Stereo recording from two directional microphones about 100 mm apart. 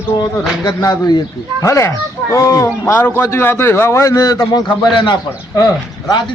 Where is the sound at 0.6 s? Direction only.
40° left (ahead or behind).